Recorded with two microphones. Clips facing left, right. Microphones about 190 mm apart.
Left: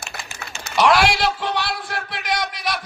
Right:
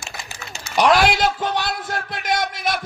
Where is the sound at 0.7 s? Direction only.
40° right (ahead or behind).